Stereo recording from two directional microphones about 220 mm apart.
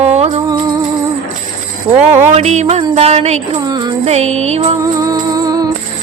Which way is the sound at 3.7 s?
20° right (ahead or behind).